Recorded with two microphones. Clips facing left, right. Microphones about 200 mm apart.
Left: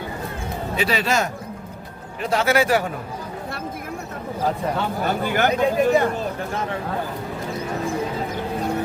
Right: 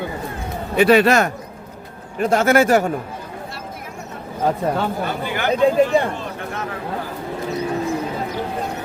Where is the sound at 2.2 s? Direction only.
50° right (ahead or behind).